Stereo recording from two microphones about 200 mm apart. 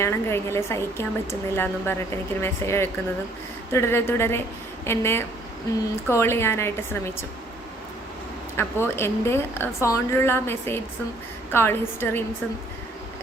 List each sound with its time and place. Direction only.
0.0 s a woman's voice: 15° left (ahead or behind)
8.5 s a woman's voice: 10° left (ahead or behind)